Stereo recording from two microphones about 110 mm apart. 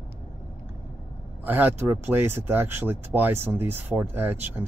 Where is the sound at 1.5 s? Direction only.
15° right (ahead or behind).